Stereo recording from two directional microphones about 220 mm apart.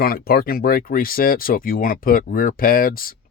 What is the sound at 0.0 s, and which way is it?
Speech, 45° left (ahead or behind).